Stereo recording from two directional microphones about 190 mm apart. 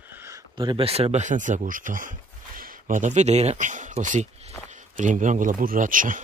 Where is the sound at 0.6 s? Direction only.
25° right (ahead or behind); by 6.2 s 45° right (ahead or behind).